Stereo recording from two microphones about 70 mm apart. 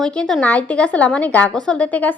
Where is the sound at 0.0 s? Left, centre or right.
Centre.